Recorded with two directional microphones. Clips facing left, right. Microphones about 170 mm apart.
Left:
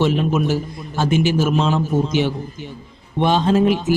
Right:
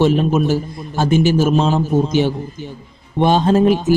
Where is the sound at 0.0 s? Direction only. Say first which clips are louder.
Right 3 dB; 40° right (ahead or behind).